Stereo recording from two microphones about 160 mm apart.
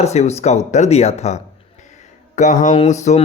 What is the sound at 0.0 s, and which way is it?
Speech, 45° left (ahead or behind).